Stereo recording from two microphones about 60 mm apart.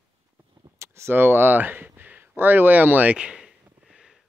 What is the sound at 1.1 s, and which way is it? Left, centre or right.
Speech, right.